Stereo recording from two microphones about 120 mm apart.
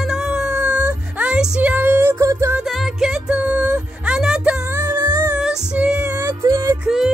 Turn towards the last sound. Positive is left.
turn(degrees=-5)  # may be behind; listen again after turning